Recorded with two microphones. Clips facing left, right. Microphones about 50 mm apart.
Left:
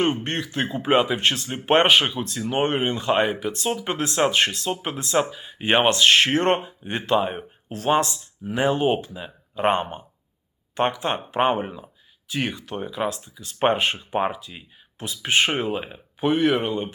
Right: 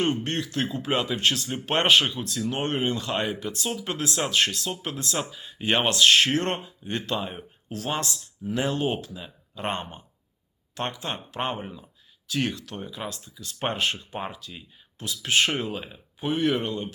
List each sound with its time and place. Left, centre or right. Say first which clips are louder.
0.0 s speech: left 3 dB; left
1.9 s speech: left 2 dB; centre
2.2 s speech: left 5 dB; left
3.5 s speech: left 5 dB; left
5.3 s speech: left 4 dB; centre
5.5 s speech: left 4 dB; left
8.1 s speech: left 1 dB; centre
11.0 s speech: left 9 dB; left
13.1 s speech: left 7 dB; left
13.7 s speech: left 5 dB; left
16.2 s speech: left 5 dB; centre